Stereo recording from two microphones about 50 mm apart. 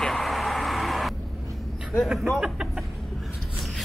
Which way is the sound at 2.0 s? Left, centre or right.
Centre.